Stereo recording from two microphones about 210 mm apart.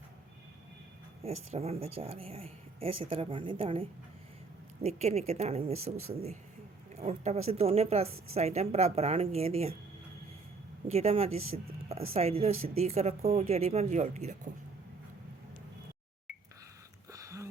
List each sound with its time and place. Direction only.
1.2 s speech: 30° right (ahead or behind)
6.9 s speech: 30° right (ahead or behind)
10.8 s speech: 30° right (ahead or behind)
11.5 s a sound: 30° right (ahead or behind)
12.1 s speech: 30° right (ahead or behind)
17.1 s a sound: 15° right (ahead or behind)